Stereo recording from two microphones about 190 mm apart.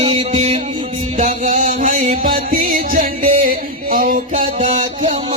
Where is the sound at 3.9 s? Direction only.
45° right (ahead or behind).